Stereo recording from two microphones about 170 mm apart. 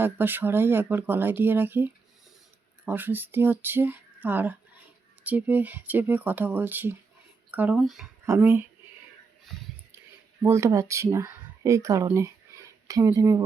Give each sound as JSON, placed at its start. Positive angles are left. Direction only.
{"t": 0.0, "sound": "speech", "side_deg": -10}
{"t": 8.3, "sound": "speech", "side_deg": -15}
{"t": 10.4, "sound": "speech", "side_deg": -15}